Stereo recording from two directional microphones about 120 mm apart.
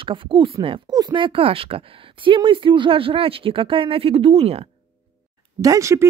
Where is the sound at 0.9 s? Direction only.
35° right (ahead or behind); by 4.7 s 55° right (ahead or behind).